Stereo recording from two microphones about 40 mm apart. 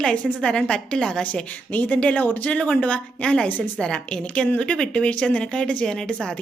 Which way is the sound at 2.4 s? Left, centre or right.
Left.